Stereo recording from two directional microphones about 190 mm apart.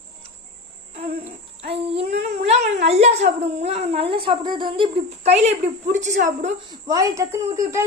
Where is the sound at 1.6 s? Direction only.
30° right (ahead or behind).